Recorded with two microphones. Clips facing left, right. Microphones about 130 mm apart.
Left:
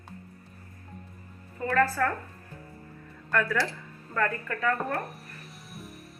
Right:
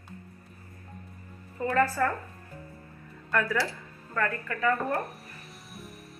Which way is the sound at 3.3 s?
5° right (ahead or behind).